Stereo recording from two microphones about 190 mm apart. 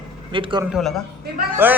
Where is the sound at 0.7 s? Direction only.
Centre (ahead or behind).